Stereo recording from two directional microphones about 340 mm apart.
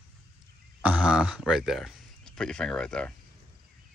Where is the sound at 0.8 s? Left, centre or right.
Centre.